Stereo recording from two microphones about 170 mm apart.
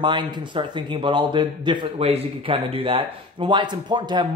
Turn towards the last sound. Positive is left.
turn(degrees=-25)  # may be behind; listen again after turning